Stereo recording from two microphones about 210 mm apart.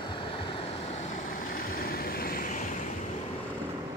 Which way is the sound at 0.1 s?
25° left (ahead or behind).